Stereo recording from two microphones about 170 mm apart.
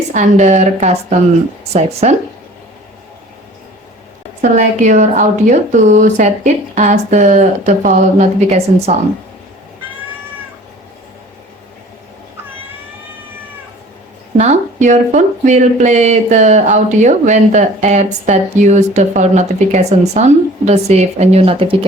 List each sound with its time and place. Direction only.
0.1 s speech: 45° right (ahead or behind)
4.4 s speech: 45° right (ahead or behind)
14.3 s speech: 40° right (ahead or behind)